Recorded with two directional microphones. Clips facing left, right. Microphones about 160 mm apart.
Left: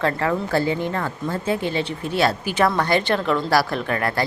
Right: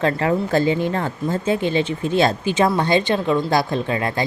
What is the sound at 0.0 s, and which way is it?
Speech, 20° right (ahead or behind).